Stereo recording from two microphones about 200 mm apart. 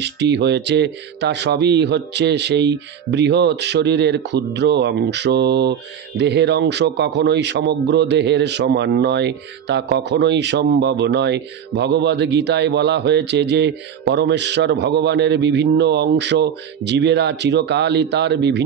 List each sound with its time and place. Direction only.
0.0 s speech: 60° right (ahead or behind)